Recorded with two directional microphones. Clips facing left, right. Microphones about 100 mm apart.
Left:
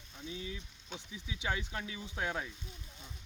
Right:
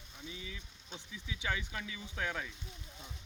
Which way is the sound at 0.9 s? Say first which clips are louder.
Left 1 dB; 20° left (ahead or behind).